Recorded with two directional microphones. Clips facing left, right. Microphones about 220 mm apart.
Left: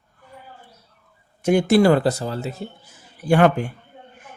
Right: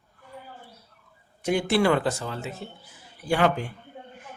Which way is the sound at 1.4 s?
45° left (ahead or behind).